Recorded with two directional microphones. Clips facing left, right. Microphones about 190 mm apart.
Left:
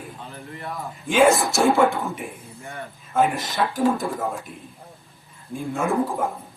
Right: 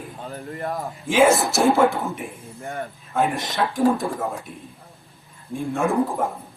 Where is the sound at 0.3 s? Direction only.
45° right (ahead or behind).